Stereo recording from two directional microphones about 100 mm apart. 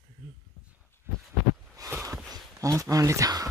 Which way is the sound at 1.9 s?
25° right (ahead or behind).